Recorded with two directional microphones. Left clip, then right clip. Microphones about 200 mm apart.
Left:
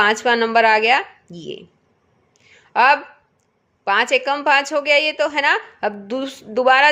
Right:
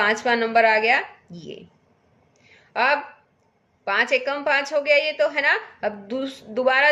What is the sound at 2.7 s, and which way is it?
A woman's voice, 40° left (ahead or behind).